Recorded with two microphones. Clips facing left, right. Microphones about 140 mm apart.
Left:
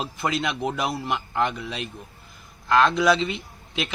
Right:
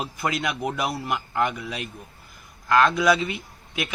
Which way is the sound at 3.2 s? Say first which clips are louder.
Left 2 dB; 20° left (ahead or behind).